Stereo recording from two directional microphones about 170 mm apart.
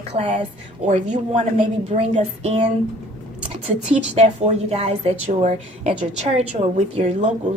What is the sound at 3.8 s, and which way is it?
A woman's voice, 40° right (ahead or behind).